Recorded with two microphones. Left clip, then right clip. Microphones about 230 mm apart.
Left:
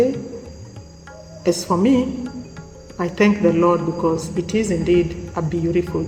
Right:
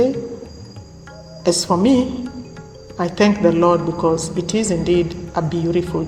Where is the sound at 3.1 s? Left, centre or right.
Right.